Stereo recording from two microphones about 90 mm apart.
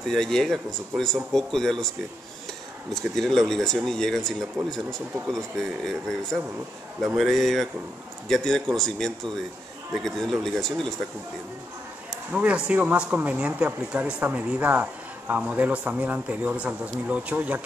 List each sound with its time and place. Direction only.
0.1 s speech: 5° left (ahead or behind)
2.9 s a man's voice: 5° left (ahead or behind)
12.3 s a man's voice: 15° right (ahead or behind)